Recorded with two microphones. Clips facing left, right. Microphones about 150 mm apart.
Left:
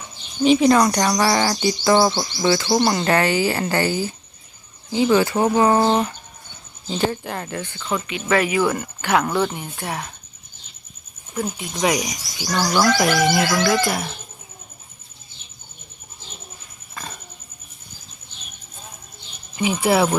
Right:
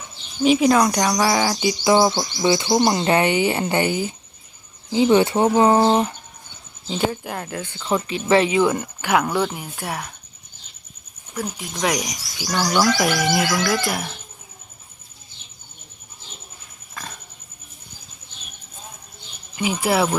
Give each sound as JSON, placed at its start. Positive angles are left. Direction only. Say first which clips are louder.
{"t": 0.4, "sound": "speech", "louder": "left 1 dB", "side_deg": -5}
{"t": 6.8, "sound": "speech", "louder": "left 1 dB", "side_deg": -5}
{"t": 7.9, "sound": "speech", "louder": "right 3 dB", "side_deg": -30}
{"t": 8.7, "sound": "speech", "louder": "even", "side_deg": -10}
{"t": 11.3, "sound": "speech", "louder": "left 2 dB", "side_deg": 0}
{"t": 16.9, "sound": "pig", "louder": "left 1 dB", "side_deg": 0}
{"t": 19.5, "sound": "speech", "louder": "left 2 dB", "side_deg": 0}